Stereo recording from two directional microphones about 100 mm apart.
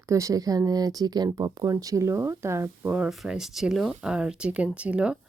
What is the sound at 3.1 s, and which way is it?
Speech, 5° right (ahead or behind).